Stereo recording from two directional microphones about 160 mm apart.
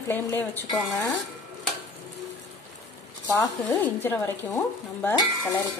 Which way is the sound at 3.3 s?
10° left (ahead or behind).